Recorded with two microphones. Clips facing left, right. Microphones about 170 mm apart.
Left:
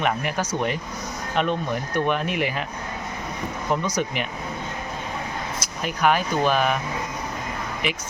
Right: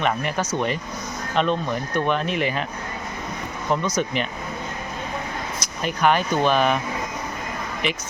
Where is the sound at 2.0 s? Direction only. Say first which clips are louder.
Right 2 dB; 10° left (ahead or behind).